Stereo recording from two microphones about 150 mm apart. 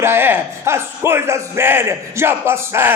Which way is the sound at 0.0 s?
15° right (ahead or behind).